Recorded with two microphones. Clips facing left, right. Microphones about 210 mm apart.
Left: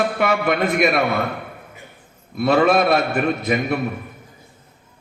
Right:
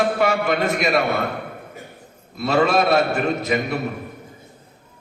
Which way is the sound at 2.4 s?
55° left (ahead or behind).